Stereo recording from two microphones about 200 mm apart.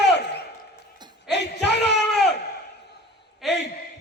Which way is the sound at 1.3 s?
60° left (ahead or behind).